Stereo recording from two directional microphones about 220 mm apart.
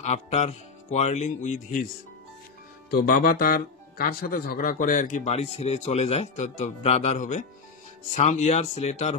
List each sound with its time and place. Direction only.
0.0 s speech: 30° left (ahead or behind)
2.9 s speech: 40° left (ahead or behind)